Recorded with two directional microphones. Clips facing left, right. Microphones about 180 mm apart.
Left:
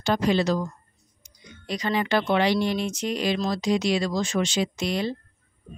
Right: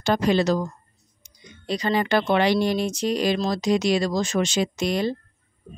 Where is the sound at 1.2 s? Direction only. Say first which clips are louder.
Right 4 dB; 25° right (ahead or behind); by 5.1 s 45° right (ahead or behind).